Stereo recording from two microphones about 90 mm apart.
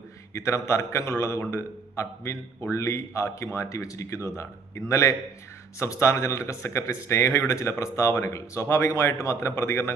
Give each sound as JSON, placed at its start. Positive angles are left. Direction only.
{"t": 0.3, "sound": "speech", "side_deg": 35}